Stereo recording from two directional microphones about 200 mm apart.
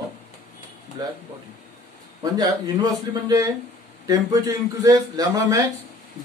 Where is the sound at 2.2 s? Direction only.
20° right (ahead or behind).